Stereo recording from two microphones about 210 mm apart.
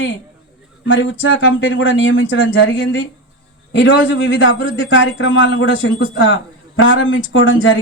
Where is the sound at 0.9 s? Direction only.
65° left (ahead or behind).